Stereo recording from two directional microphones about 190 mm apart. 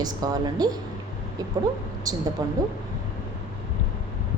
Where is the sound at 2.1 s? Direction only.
20° right (ahead or behind).